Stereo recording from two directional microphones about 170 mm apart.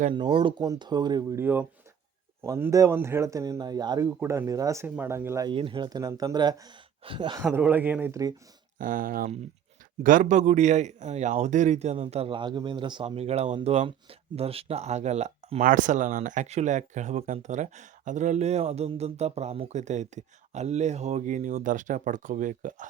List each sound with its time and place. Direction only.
0.1 s speech: 30° right (ahead or behind)
1.4 s speech: 10° right (ahead or behind)
5.5 s speech: 30° right (ahead or behind)
7.4 s speech: 10° right (ahead or behind)
8.8 s a man's voice: 55° right (ahead or behind)
15.6 s speech: 50° right (ahead or behind)